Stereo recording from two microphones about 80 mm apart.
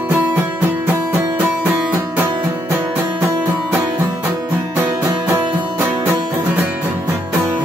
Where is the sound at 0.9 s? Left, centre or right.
Right.